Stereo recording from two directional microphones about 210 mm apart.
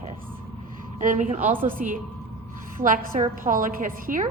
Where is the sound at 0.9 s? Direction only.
40° right (ahead or behind).